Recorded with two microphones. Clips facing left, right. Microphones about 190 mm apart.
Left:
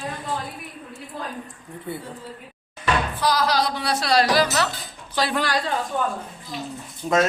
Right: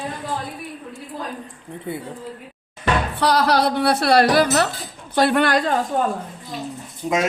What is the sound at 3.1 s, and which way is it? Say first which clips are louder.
Speech: right 6 dB; 65° right (ahead or behind).